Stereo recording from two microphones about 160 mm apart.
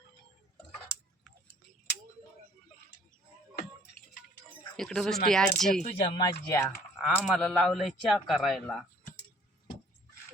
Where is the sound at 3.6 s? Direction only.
70° left (ahead or behind).